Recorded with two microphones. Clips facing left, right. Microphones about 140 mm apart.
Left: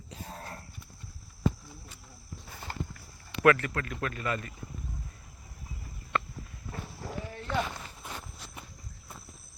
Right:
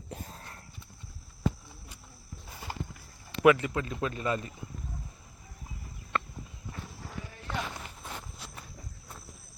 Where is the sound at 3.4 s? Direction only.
15° right (ahead or behind).